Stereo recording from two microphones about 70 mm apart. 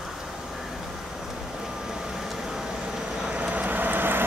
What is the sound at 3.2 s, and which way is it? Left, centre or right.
Vehicle, centre.